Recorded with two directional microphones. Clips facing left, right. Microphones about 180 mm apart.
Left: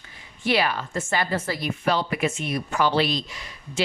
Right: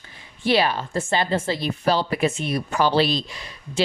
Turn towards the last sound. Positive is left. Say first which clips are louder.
# right 3 dB
turn(degrees=-30)  # may be behind; listen again after turning